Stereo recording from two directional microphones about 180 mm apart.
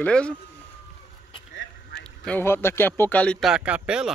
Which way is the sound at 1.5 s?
90° left.